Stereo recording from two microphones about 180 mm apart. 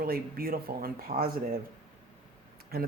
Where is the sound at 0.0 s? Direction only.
55° right (ahead or behind).